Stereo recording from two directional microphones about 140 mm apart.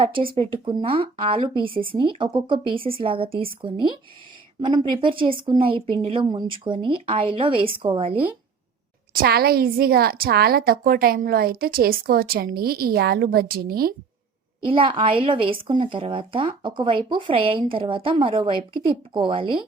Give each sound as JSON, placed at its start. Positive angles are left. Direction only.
{"t": 0.0, "sound": "a woman's voice", "side_deg": -40}
{"t": 9.2, "sound": "a woman's voice", "side_deg": -90}
{"t": 14.7, "sound": "a woman's voice", "side_deg": -40}